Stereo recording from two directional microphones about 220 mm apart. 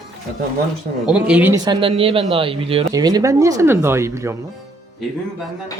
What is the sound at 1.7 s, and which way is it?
Speech, 25° right (ahead or behind).